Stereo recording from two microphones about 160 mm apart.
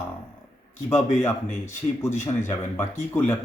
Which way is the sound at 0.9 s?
10° left (ahead or behind).